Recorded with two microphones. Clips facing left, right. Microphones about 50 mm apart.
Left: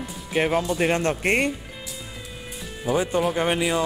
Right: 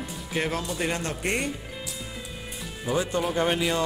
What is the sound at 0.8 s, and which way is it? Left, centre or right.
Speech, left.